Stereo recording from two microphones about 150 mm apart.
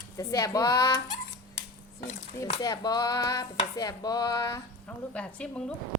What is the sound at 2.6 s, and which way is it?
A woman's voice, 25° left (ahead or behind).